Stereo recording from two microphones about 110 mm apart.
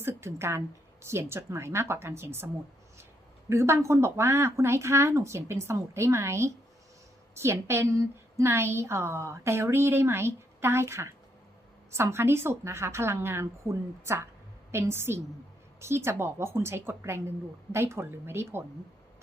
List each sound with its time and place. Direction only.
0.0 s a woman's voice: 25° right (ahead or behind)
3.5 s a woman's voice: 25° right (ahead or behind)